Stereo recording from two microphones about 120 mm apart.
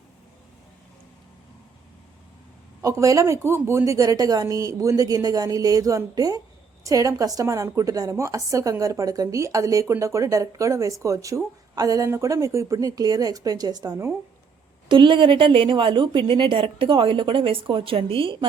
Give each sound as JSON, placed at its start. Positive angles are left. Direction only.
{"t": 2.8, "sound": "a woman's voice", "side_deg": -30}
{"t": 14.8, "sound": "a woman's voice", "side_deg": -45}